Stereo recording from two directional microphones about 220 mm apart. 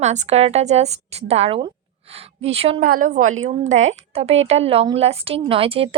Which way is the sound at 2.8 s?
40° right (ahead or behind).